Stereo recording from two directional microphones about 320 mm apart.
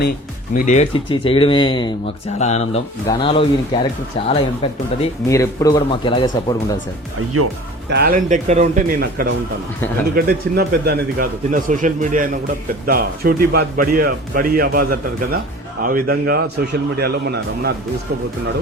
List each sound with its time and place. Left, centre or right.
0.5 s speech: left
7.3 s speech: right
7.9 s speech: right